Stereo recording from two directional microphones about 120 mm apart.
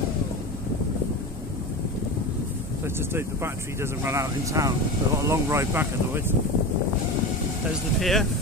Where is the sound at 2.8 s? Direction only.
20° right (ahead or behind).